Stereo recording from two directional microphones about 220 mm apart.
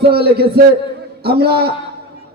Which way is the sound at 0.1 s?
45° right (ahead or behind).